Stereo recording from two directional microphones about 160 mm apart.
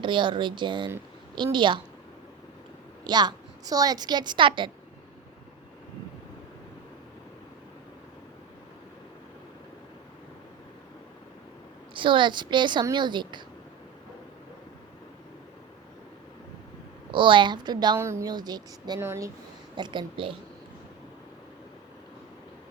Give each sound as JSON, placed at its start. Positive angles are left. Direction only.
{"t": 0.0, "sound": "a woman's voice", "side_deg": -30}
{"t": 3.0, "sound": "a woman's voice", "side_deg": -25}
{"t": 11.9, "sound": "a woman's voice", "side_deg": -30}
{"t": 17.1, "sound": "a woman's voice", "side_deg": -30}
{"t": 19.7, "sound": "a woman's voice", "side_deg": -30}